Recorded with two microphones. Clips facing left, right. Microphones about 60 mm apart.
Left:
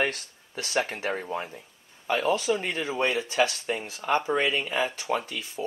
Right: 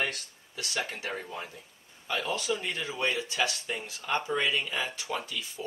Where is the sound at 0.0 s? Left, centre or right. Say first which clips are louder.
Left 5 dB; left.